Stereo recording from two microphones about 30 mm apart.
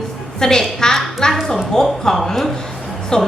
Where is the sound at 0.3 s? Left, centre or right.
Centre.